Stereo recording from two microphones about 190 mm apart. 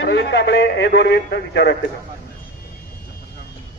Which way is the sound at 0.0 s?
65° left (ahead or behind).